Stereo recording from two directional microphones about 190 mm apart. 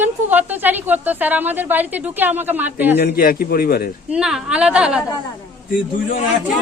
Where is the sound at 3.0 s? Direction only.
50° left (ahead or behind).